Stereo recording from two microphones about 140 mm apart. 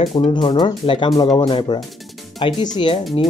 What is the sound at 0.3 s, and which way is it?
Speech, 35° left (ahead or behind).